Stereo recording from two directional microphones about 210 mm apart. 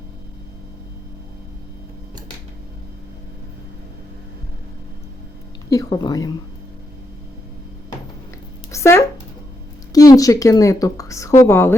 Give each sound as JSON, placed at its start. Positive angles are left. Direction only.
{"t": 5.7, "sound": "a woman's voice", "side_deg": 20}
{"t": 8.7, "sound": "a sound", "side_deg": 15}
{"t": 9.9, "sound": "a woman's voice", "side_deg": 15}